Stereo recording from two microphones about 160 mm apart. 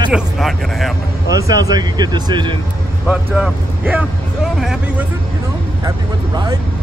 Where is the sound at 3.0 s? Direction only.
5° right (ahead or behind).